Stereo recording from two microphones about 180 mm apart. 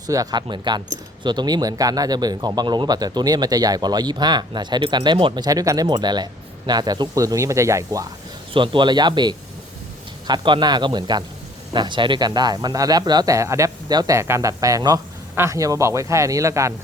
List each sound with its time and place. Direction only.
0.1 s speech: 20° right (ahead or behind)
8.5 s speech: 25° right (ahead or behind)